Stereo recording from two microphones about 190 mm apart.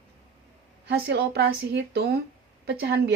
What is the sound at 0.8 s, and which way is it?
Speech, 60° right (ahead or behind).